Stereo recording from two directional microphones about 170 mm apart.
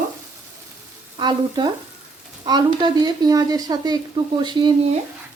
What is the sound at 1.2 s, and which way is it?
Speech, 25° right (ahead or behind).